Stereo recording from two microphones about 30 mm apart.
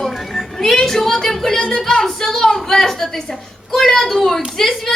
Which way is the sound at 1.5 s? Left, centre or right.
Left.